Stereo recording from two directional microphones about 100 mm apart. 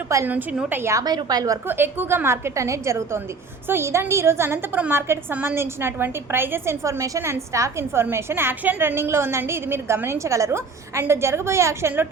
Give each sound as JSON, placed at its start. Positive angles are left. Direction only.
{"t": 0.1, "sound": "a woman's voice", "side_deg": -30}
{"t": 1.0, "sound": "a woman's voice", "side_deg": -40}
{"t": 1.6, "sound": "a woman's voice", "side_deg": -20}